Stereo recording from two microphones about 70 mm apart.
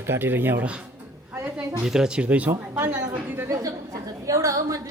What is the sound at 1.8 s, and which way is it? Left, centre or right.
Speech, centre.